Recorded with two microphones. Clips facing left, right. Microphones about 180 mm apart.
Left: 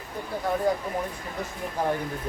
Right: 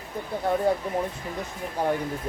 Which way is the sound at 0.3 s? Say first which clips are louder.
Right 2 dB; 25° right (ahead or behind).